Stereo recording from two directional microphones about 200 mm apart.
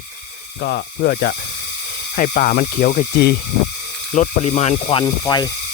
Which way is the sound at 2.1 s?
35° left (ahead or behind).